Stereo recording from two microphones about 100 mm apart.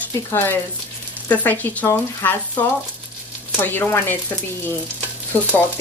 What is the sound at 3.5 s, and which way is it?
Speech, 20° left (ahead or behind).